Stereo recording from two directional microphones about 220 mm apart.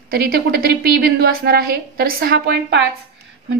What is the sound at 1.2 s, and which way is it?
A woman's voice, 45° right (ahead or behind).